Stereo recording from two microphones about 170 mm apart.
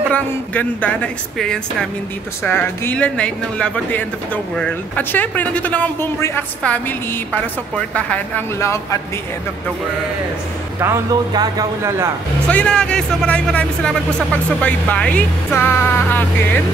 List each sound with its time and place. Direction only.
0.1 s speech: 10° left (ahead or behind)
10.8 s speech: 20° right (ahead or behind)
12.4 s speech: 5° left (ahead or behind)